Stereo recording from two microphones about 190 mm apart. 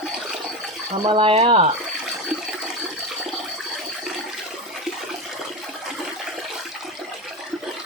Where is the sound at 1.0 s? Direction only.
25° right (ahead or behind).